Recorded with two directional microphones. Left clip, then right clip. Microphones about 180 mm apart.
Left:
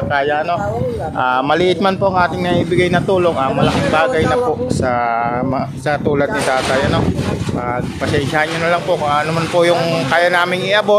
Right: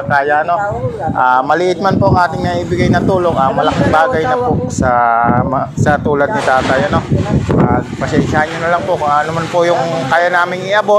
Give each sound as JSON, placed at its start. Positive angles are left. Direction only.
{"t": 3.1, "sound": "speech", "side_deg": 10}
{"t": 8.4, "sound": "speech", "side_deg": 15}